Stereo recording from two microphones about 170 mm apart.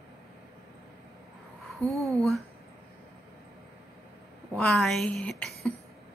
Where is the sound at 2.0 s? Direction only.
20° right (ahead or behind).